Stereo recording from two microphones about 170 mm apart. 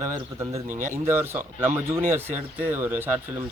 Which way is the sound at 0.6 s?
50° right (ahead or behind).